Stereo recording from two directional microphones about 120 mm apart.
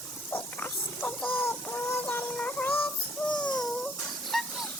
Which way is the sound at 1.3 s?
15° left (ahead or behind).